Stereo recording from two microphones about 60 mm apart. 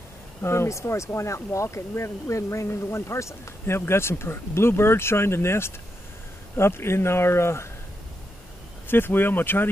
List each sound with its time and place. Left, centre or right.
0.4 s speech: left
8.8 s speech: left